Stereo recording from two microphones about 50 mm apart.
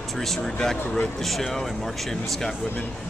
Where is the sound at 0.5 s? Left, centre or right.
Centre.